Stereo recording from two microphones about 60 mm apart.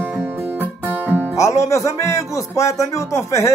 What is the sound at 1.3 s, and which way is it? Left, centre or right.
Speech, left.